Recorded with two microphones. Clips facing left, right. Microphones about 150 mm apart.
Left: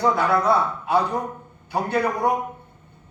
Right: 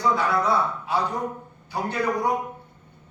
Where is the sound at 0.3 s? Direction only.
60° left (ahead or behind).